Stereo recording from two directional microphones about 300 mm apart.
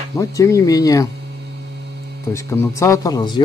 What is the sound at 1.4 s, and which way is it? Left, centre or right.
Mains hum, right.